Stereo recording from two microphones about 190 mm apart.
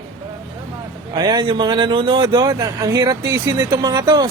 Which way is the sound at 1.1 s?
25° right (ahead or behind).